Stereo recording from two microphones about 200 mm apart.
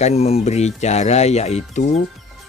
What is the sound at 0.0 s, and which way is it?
A man's voice, 30° left (ahead or behind).